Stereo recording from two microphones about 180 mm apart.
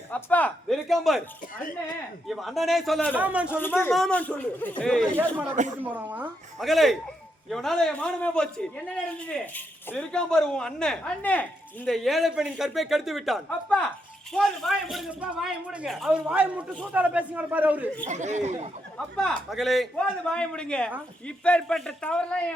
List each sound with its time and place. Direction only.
0.1 s a man's voice: 10° left (ahead or behind)
2.2 s a man's voice: centre (ahead or behind)
3.2 s a woman's voice: 10° right (ahead or behind)
3.6 s a man's voice: 10° left (ahead or behind)
5.8 s a woman's voice: 10° right (ahead or behind)
18.1 s speech: 40° right (ahead or behind)
18.9 s a man's voice: 5° left (ahead or behind)